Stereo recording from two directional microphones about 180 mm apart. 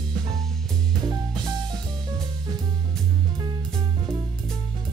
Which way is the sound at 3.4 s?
25° right (ahead or behind).